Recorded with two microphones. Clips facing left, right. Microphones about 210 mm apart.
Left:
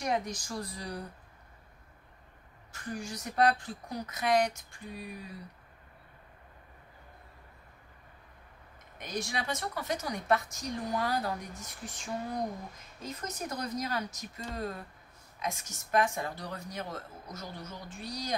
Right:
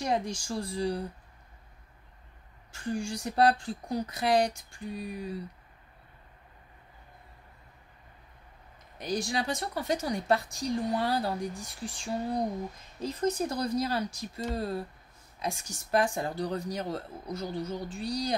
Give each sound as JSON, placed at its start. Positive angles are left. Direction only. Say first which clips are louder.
{"t": 0.0, "sound": "speech", "louder": "right 2 dB", "side_deg": -30}
{"t": 2.7, "sound": "a woman's voice", "louder": "right 6 dB", "side_deg": -30}
{"t": 8.9, "sound": "a woman's voice", "louder": "right 5 dB", "side_deg": -30}